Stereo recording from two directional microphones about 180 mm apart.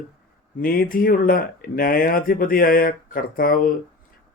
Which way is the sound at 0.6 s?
50° left (ahead or behind).